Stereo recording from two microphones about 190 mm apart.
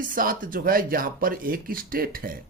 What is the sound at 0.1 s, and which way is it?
Speech, 45° right (ahead or behind).